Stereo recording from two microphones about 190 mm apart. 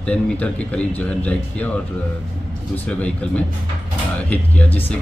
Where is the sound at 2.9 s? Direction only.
5° left (ahead or behind).